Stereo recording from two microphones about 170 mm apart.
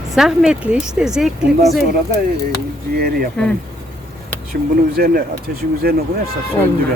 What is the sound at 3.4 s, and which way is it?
Speech, 5° left (ahead or behind).